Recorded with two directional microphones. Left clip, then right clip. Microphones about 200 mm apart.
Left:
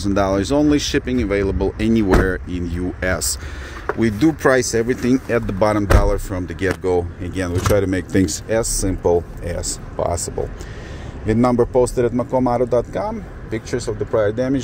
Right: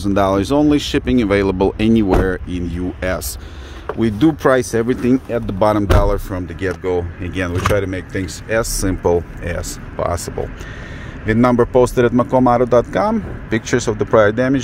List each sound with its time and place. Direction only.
0.0 s speech: 10° right (ahead or behind)
1.1 s speech: 25° right (ahead or behind)
1.9 s speech: 5° right (ahead or behind)
6.8 s speech: 5° left (ahead or behind)
11.2 s speech: centre (ahead or behind)